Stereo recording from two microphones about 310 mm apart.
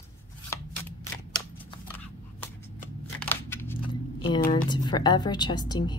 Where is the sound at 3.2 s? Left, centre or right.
Centre.